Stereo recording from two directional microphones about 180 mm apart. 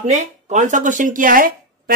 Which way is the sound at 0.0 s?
40° right (ahead or behind).